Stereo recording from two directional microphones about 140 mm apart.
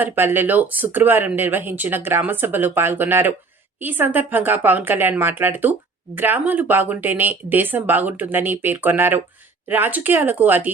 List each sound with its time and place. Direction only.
0.0 s speech: 15° right (ahead or behind)